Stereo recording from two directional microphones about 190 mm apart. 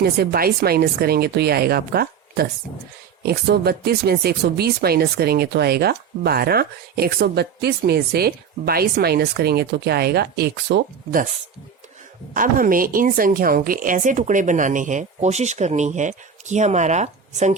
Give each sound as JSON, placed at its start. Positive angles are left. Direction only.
{"t": 0.0, "sound": "speech", "side_deg": -55}
{"t": 12.3, "sound": "a woman's voice", "side_deg": -45}